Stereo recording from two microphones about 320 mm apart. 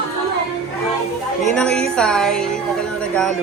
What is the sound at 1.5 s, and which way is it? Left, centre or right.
Speech, centre.